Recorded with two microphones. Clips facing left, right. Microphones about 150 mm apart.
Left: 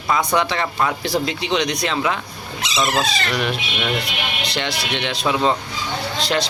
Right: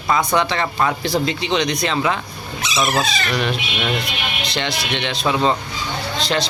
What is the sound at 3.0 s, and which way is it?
Speech, 35° left (ahead or behind).